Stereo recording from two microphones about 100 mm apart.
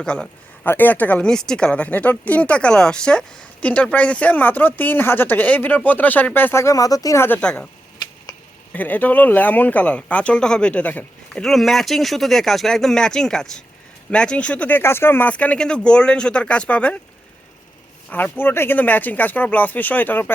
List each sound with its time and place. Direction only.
0.0 s a man's voice: 10° left (ahead or behind); by 7.2 s 35° left (ahead or behind)
7.4 s speech: 10° left (ahead or behind)
8.7 s speech: 15° left (ahead or behind)
11.4 s speech: centre (ahead or behind)
18.1 s speech: 20° left (ahead or behind)